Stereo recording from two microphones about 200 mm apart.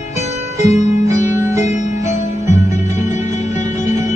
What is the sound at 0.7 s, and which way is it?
Music, 35° left (ahead or behind).